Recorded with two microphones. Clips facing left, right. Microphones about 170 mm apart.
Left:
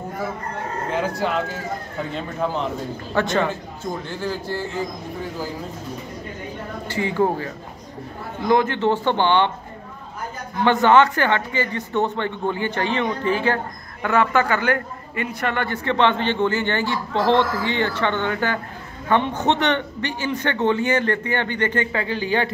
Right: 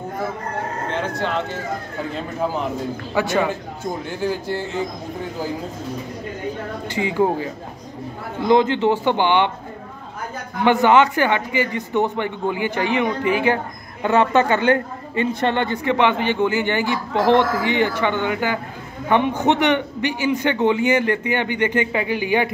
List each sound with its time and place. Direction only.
2.1 s a man's voice: 5° right (ahead or behind)
6.9 s a woman's voice: 15° right (ahead or behind)
10.6 s a woman's voice: 15° right (ahead or behind)